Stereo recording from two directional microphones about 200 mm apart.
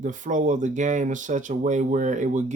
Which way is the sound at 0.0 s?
40° right (ahead or behind).